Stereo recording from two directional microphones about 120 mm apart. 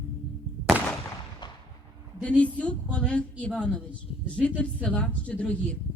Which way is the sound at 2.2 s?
10° left (ahead or behind).